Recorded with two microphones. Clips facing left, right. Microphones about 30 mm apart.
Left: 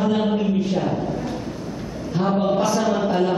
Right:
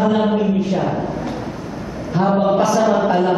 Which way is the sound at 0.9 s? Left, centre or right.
Right.